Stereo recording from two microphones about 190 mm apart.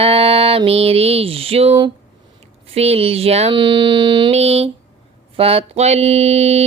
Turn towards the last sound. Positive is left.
turn(degrees=-35)  # may be behind; listen again after turning